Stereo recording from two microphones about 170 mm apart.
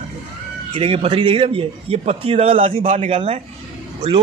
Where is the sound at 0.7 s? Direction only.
30° right (ahead or behind).